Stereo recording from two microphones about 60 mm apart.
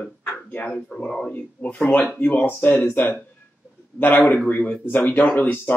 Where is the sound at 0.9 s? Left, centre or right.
Centre.